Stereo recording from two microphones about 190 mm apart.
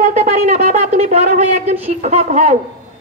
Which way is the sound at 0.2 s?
40° right (ahead or behind).